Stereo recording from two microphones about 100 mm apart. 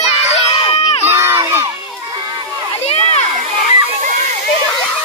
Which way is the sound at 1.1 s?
25° right (ahead or behind).